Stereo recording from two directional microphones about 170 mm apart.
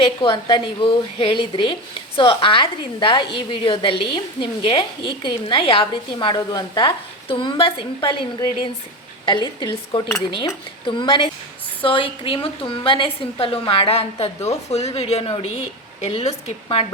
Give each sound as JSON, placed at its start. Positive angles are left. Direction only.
{"t": 0.0, "sound": "a woman's voice", "side_deg": 30}